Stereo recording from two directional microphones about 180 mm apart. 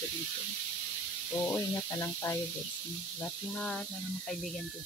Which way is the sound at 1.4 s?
15° left (ahead or behind).